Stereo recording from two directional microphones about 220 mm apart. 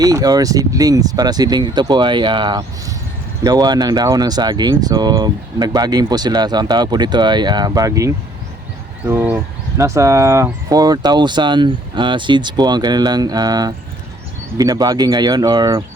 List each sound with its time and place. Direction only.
0.0 s speech: 15° right (ahead or behind)